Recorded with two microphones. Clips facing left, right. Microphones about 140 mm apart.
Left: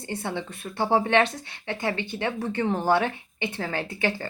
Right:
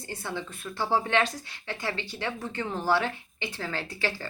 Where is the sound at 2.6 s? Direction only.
20° left (ahead or behind).